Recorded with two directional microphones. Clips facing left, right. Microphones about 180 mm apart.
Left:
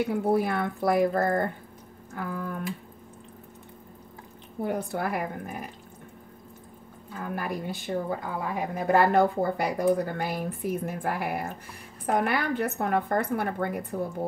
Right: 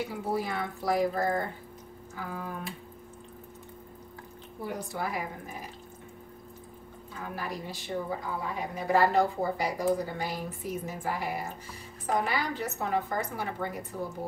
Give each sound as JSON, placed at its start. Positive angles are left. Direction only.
{"t": 0.0, "sound": "a woman's voice", "side_deg": 55}
{"t": 4.6, "sound": "a woman's voice", "side_deg": 55}
{"t": 7.3, "sound": "a woman's voice", "side_deg": 55}